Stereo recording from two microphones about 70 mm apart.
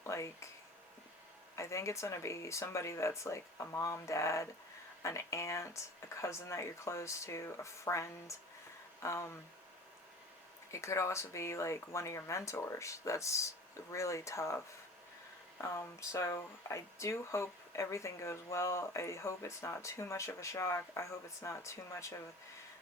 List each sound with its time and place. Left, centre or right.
0.0 s a sound: left
1.5 s speech: left
10.7 s speech: left
15.6 s speech: left